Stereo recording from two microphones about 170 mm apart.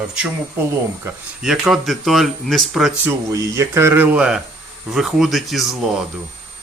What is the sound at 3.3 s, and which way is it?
Speech, 20° right (ahead or behind).